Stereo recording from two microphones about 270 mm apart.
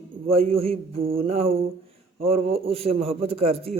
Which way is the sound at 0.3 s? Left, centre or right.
Right.